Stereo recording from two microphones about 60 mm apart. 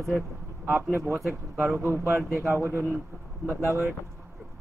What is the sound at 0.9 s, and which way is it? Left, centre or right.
Speech, right.